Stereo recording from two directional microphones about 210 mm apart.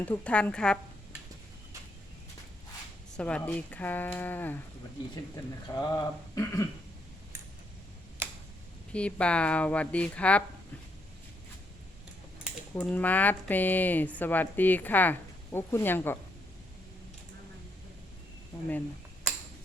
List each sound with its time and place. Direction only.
0.0 s speech: 5° left (ahead or behind)
3.2 s speech: 5° left (ahead or behind)
5.7 s speech: 15° left (ahead or behind)
8.9 s speech: 5° left (ahead or behind)
12.7 s speech: 5° left (ahead or behind)